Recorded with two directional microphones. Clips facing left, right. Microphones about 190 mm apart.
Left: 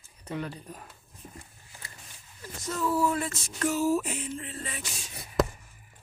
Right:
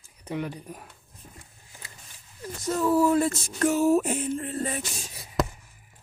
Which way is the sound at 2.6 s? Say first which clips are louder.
Right 6 dB; 40° right (ahead or behind).